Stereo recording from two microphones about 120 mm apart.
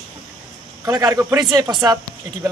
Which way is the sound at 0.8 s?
30° right (ahead or behind).